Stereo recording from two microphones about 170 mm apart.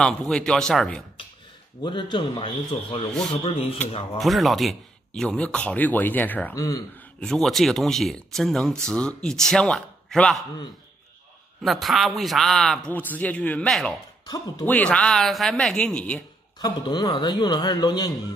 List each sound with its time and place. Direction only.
0.0 s a man's voice: 5° left (ahead or behind)
1.8 s a man's voice: 25° left (ahead or behind)
3.1 s a man's voice: centre (ahead or behind)
11.6 s a man's voice: centre (ahead or behind)
14.2 s a man's voice: 20° left (ahead or behind)
14.7 s a man's voice: 5° left (ahead or behind)
16.5 s a man's voice: 25° left (ahead or behind)